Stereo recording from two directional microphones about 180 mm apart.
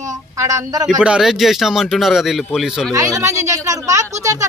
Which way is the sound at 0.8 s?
5° right (ahead or behind).